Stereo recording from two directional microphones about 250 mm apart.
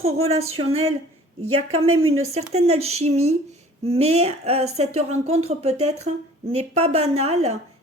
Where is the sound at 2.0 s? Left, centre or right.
Right.